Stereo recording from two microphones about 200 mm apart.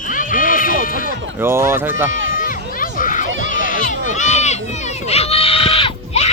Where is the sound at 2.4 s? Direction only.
45° left (ahead or behind).